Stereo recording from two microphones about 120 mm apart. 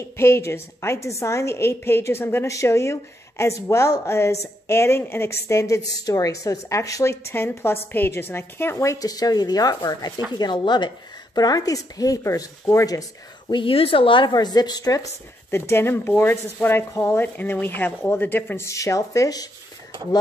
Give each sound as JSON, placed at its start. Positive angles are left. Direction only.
{"t": 0.2, "sound": "a woman's voice", "side_deg": 20}
{"t": 13.5, "sound": "speech", "side_deg": 45}
{"t": 15.5, "sound": "a woman's voice", "side_deg": 20}